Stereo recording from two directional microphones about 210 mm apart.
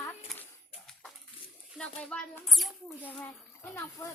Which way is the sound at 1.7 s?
5° left (ahead or behind).